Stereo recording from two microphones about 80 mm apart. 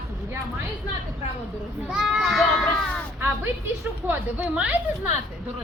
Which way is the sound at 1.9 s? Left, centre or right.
Centre.